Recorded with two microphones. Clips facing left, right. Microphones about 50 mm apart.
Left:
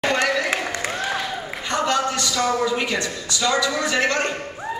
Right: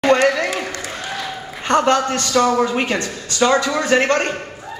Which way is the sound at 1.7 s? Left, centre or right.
Right.